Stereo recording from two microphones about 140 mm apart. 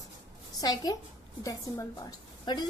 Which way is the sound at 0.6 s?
30° left (ahead or behind).